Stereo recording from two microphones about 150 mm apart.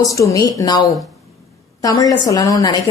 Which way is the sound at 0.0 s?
20° left (ahead or behind).